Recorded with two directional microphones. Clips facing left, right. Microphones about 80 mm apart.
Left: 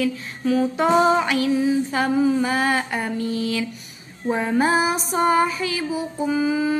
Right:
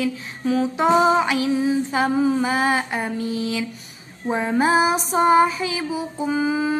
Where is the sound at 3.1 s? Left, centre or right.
Left.